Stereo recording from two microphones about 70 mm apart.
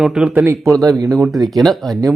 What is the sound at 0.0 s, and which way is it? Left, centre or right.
Speech, centre.